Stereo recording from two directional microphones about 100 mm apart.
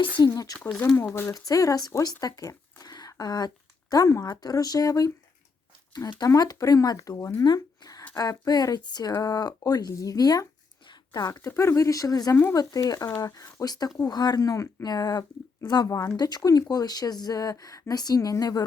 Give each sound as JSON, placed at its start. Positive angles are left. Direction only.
{"t": 0.2, "sound": "speech", "side_deg": 35}
{"t": 7.4, "sound": "a sound", "side_deg": 45}
{"t": 8.1, "sound": "speech", "side_deg": 35}
{"t": 11.3, "sound": "speech", "side_deg": 30}
{"t": 15.9, "sound": "speech", "side_deg": 35}